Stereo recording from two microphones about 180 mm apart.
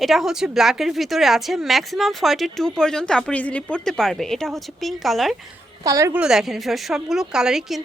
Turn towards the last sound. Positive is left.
turn(degrees=-5)  # may be behind; listen again after turning